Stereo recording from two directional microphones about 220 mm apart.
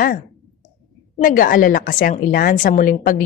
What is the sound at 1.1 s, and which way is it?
A woman's voice, 40° left (ahead or behind).